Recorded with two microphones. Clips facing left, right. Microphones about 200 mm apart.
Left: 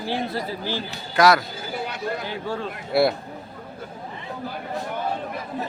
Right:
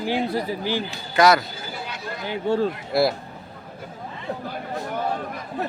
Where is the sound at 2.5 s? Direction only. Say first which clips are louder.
Right 8 dB; 25° right (ahead or behind).